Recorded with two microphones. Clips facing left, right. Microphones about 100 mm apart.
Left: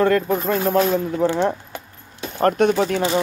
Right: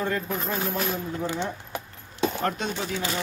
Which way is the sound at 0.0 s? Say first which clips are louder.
Left 10 dB; 70° left (ahead or behind).